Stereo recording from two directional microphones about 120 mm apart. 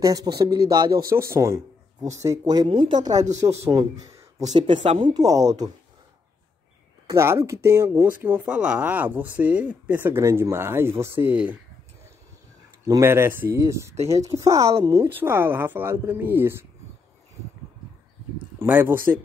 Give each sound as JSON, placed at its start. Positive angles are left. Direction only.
{"t": 0.0, "sound": "speech", "side_deg": -30}
{"t": 1.1, "sound": "speech", "side_deg": -20}
{"t": 4.8, "sound": "speech", "side_deg": -50}
{"t": 5.1, "sound": "speech", "side_deg": -30}
{"t": 7.1, "sound": "speech", "side_deg": -20}
{"t": 12.8, "sound": "speech", "side_deg": -25}
{"t": 18.6, "sound": "speech", "side_deg": -20}